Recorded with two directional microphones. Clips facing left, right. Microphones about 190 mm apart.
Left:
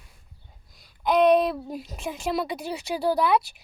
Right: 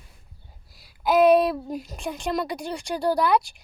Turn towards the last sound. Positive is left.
turn(degrees=5)  # may be behind; listen again after turning